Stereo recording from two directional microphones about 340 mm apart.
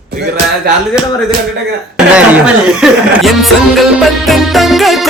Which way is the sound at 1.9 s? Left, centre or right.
Centre.